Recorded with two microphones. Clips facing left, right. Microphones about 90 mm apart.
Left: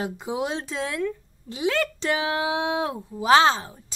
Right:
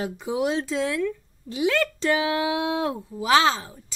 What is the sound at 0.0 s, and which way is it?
Speech, 30° left (ahead or behind).